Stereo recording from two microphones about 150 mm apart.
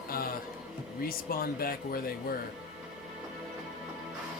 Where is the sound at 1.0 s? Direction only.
80° left.